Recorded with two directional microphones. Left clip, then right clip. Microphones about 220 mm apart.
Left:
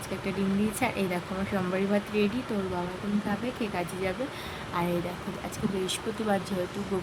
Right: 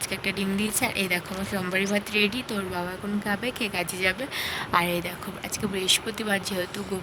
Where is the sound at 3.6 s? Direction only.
50° right (ahead or behind).